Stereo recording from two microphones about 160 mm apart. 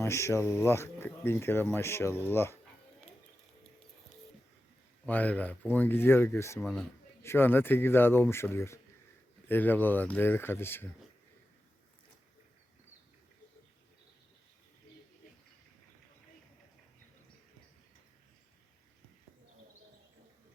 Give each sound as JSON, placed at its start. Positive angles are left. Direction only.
{"t": 0.0, "sound": "speech", "side_deg": 15}
{"t": 5.0, "sound": "speech", "side_deg": 10}
{"t": 6.6, "sound": "a man's voice", "side_deg": 0}
{"t": 7.2, "sound": "speech", "side_deg": 15}